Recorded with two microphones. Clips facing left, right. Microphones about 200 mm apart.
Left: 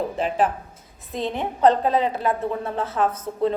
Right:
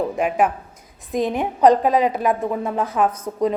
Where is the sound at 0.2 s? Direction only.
10° right (ahead or behind).